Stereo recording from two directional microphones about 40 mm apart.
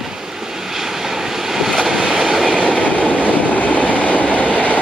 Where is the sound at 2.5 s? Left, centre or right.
Right.